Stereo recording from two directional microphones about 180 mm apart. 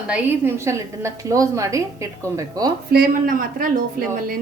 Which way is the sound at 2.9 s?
55° right (ahead or behind).